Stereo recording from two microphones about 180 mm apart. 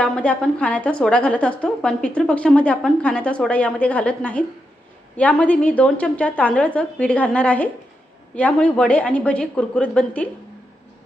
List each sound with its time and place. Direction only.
0.0 s a woman's voice: 5° left (ahead or behind)